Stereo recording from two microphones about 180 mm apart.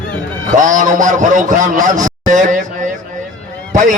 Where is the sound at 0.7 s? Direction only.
45° right (ahead or behind).